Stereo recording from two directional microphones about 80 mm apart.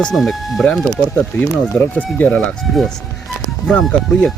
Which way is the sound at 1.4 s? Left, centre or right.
Left.